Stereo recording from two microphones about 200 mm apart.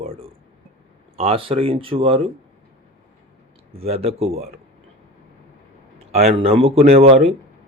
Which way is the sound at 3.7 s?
30° right (ahead or behind).